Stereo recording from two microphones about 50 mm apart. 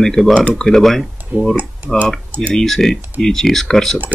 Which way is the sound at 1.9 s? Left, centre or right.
Centre.